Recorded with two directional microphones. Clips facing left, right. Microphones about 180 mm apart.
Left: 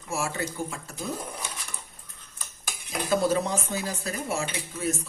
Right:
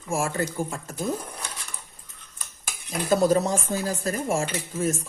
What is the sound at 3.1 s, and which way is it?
Speech, 40° right (ahead or behind).